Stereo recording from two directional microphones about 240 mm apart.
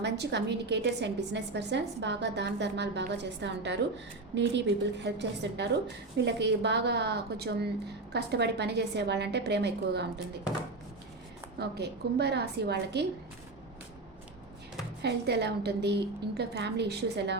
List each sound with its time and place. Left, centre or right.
0.0 s a woman's voice: right
11.6 s a woman's voice: right
15.0 s a woman's voice: right